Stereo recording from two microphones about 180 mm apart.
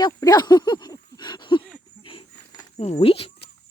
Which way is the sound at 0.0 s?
20° left (ahead or behind).